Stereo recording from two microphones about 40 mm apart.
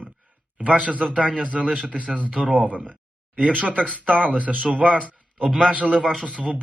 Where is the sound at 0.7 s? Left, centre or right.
Right.